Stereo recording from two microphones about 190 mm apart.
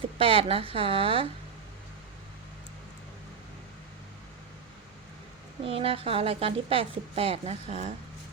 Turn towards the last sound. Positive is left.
turn(degrees=-35)  # may be behind; listen again after turning